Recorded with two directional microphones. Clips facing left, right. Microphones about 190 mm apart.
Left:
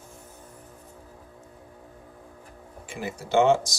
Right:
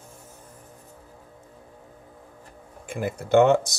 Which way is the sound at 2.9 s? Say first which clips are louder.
Right 6 dB; 55° right (ahead or behind).